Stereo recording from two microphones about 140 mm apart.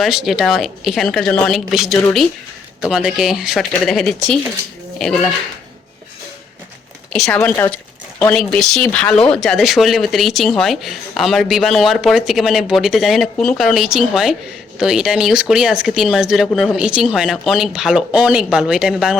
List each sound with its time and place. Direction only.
0.0 s speech: centre (ahead or behind)
7.1 s speech: 5° left (ahead or behind)